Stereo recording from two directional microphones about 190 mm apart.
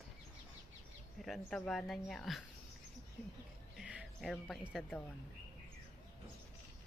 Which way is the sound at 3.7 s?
5° right (ahead or behind).